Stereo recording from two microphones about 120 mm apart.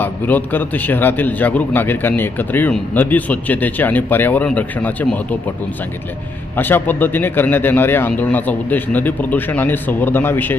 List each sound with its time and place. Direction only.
0.0 s speech: 15° left (ahead or behind)
6.6 s speech: 15° left (ahead or behind)